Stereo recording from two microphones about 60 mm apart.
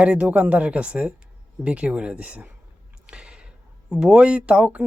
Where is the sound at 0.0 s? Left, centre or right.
Right.